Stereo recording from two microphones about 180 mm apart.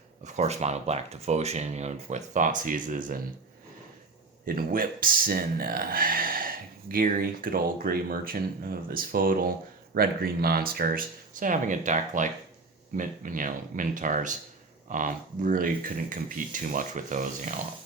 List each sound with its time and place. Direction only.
0.3 s speech: 40° right (ahead or behind)
4.4 s speech: 55° right (ahead or behind)